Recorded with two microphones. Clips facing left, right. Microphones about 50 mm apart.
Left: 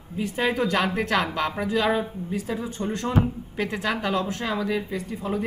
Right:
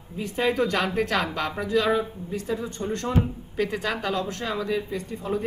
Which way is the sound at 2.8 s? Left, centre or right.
Centre.